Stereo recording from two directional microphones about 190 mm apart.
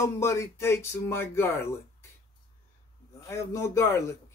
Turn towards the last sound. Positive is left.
turn(degrees=15)  # may be behind; listen again after turning